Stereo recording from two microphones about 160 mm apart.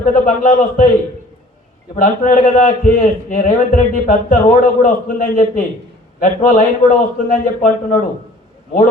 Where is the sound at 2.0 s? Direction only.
55° left (ahead or behind).